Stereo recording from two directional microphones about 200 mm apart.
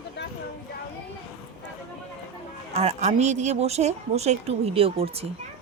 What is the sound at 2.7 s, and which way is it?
Speech, 30° right (ahead or behind).